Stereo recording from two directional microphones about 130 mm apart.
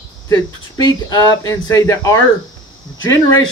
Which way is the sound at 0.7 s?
30° left (ahead or behind).